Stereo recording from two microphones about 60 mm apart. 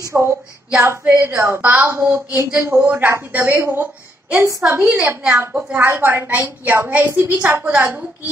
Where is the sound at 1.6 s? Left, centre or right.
Right.